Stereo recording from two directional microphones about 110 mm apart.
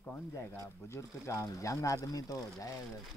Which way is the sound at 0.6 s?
25° left (ahead or behind).